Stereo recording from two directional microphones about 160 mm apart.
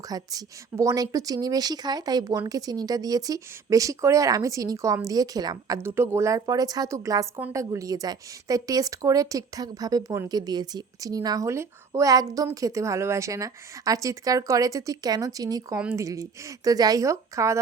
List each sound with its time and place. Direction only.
0.1 s a woman's voice: 25° right (ahead or behind)